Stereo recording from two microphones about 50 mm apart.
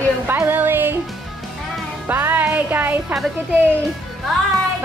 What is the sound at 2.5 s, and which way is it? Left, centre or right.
Speech, right.